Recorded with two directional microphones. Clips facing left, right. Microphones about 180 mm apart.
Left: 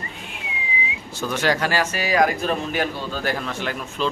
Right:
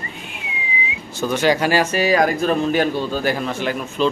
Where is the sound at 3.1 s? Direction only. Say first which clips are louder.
Right 5 dB; 10° right (ahead or behind).